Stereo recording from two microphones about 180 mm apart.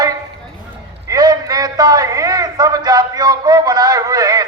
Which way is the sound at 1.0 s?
20° right (ahead or behind).